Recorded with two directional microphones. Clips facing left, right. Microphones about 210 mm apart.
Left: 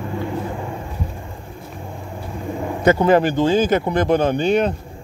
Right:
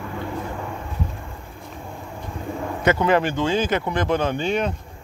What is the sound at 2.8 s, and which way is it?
Speech, 35° left (ahead or behind).